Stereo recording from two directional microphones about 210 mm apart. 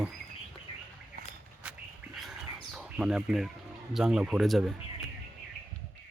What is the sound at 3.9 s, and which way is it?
Speech, 5° right (ahead or behind).